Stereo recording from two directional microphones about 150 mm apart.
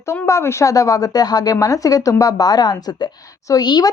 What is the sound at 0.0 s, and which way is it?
A woman's voice, 20° left (ahead or behind).